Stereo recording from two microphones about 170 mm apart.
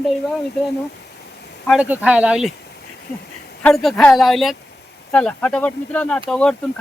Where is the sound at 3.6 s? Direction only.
5° left (ahead or behind).